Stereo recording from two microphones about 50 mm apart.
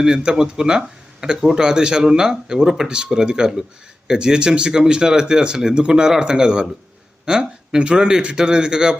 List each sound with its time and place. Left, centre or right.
0.0 s speech: centre